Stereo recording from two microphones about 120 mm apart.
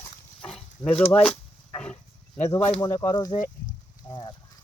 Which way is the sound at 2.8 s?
25° left (ahead or behind).